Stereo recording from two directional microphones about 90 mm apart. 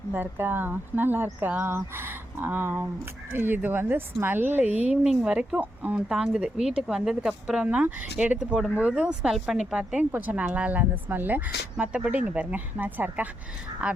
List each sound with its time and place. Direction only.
0.1 s a woman's voice: 20° right (ahead or behind)